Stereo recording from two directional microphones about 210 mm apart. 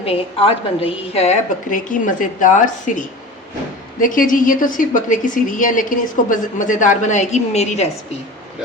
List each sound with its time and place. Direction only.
0.0 s a woman's voice: 25° left (ahead or behind)
4.0 s a woman's voice: 40° left (ahead or behind)